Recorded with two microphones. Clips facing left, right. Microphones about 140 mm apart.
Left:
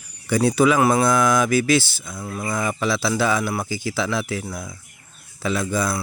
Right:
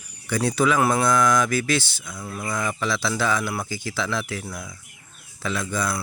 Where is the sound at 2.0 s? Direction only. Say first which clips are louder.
Left 3 dB; 25° left (ahead or behind).